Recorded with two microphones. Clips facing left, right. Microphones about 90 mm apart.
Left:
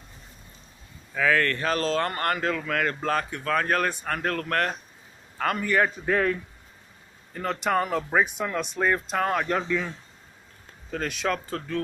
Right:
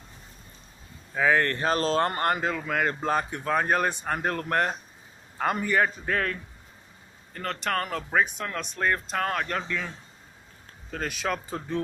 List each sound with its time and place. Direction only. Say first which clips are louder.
1.1 s a man's voice: even; 20° right (ahead or behind)
5.8 s speech: left 2 dB; 5° left (ahead or behind)